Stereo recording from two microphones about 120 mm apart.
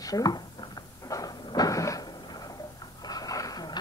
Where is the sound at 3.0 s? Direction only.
30° left (ahead or behind).